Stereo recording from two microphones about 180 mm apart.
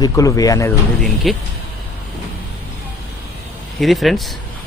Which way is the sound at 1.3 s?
Centre (ahead or behind).